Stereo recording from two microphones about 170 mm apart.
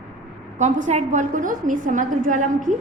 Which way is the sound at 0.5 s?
45° right (ahead or behind).